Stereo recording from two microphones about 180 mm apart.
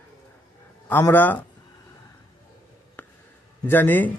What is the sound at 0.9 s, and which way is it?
Speech, 10° left (ahead or behind).